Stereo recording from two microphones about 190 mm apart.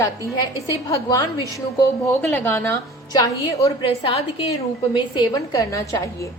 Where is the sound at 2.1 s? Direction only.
10° left (ahead or behind).